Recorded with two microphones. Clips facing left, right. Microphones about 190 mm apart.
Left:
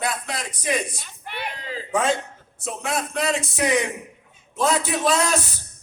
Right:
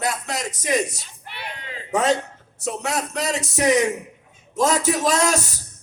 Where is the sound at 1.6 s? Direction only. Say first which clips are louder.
Left 4 dB; 35° left (ahead or behind).